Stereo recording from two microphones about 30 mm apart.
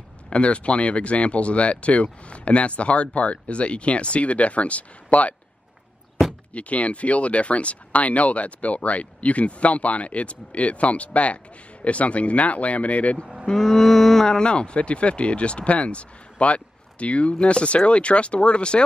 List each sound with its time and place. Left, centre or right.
0.3 s speech: left
6.5 s speech: left
13.6 s cattle: centre
14.2 s speech: left